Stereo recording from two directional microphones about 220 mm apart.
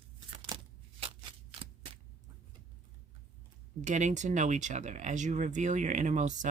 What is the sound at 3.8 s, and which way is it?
Speech, 35° right (ahead or behind).